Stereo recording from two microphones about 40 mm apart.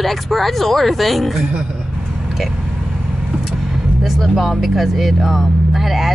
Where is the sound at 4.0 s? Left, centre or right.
Centre.